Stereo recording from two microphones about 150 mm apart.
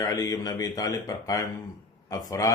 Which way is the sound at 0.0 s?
25° left (ahead or behind).